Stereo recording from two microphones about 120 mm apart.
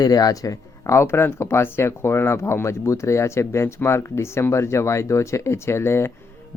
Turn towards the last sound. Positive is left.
turn(degrees=20)  # may be behind; listen again after turning